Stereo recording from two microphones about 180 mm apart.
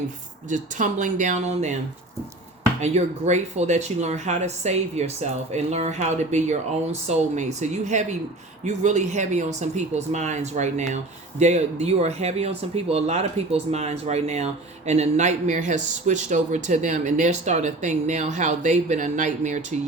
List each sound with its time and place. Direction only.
0.4 s speech: 45° right (ahead or behind)
2.8 s speech: 40° right (ahead or behind)